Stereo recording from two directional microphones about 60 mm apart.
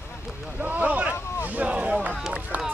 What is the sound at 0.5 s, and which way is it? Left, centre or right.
Boat, right.